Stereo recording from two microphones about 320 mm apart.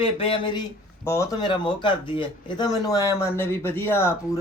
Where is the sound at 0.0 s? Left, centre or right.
Centre.